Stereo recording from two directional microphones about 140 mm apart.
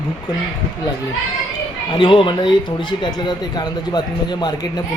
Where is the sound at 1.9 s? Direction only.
35° left (ahead or behind).